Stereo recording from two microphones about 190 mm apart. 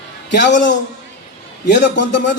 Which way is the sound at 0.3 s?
65° left (ahead or behind).